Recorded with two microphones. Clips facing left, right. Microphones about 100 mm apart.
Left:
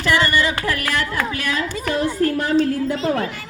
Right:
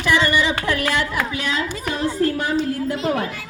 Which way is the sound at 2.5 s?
5° right (ahead or behind).